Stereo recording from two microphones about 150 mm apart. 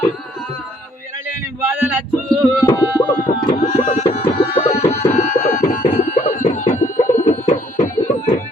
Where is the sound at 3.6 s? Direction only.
50° left (ahead or behind).